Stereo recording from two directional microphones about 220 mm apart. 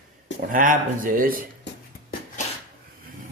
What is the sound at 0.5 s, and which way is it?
Speech, 40° right (ahead or behind).